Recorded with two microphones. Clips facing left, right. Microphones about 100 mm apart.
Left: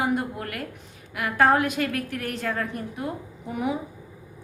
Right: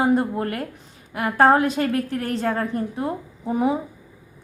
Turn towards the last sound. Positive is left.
turn(degrees=-30)  # may be behind; listen again after turning